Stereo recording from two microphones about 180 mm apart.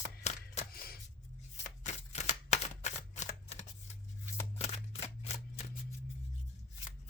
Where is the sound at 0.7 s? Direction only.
55° left (ahead or behind).